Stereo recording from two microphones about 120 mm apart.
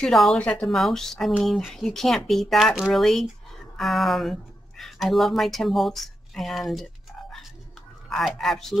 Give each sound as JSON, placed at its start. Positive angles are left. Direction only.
{"t": 0.0, "sound": "speech", "side_deg": 0}